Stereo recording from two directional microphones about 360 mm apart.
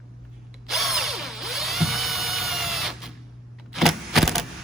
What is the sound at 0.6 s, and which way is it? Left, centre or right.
Drill, centre.